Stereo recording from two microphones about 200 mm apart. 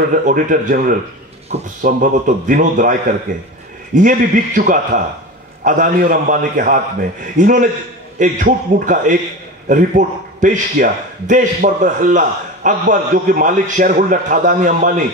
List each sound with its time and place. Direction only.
0.1 s a man's voice: 40° right (ahead or behind)